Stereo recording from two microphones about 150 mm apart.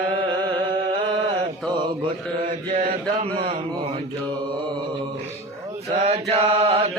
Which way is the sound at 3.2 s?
40° right (ahead or behind).